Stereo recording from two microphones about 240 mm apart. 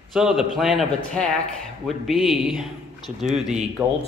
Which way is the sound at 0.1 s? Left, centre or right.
Centre.